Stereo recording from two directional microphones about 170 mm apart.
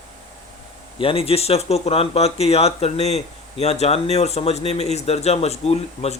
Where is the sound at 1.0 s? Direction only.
35° left (ahead or behind).